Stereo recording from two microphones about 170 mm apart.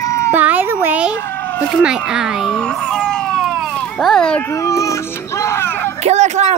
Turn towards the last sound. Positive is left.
turn(degrees=-40)  # may be behind; listen again after turning